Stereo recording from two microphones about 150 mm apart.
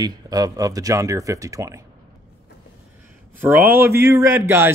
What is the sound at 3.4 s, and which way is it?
A man's voice, 15° right (ahead or behind).